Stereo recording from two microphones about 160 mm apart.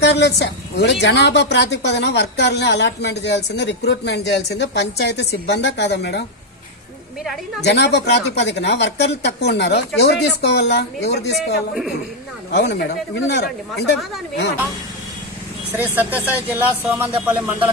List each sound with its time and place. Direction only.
0.0 s a woman's voice: 90° left
7.6 s a woman's voice: 90° left
11.3 s speech: centre (ahead or behind)
12.5 s a woman's voice: 90° left
15.7 s speech: 10° right (ahead or behind)